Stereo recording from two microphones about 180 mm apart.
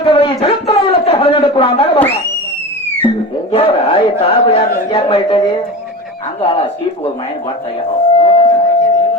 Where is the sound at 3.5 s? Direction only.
35° left (ahead or behind).